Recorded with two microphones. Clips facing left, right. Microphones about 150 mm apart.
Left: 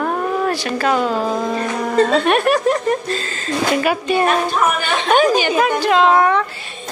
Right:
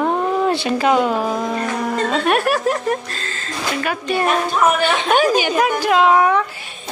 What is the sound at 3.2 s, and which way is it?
Speech, 10° left (ahead or behind).